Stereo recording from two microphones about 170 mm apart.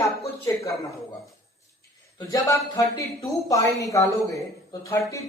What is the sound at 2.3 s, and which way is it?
A woman's voice, 20° left (ahead or behind).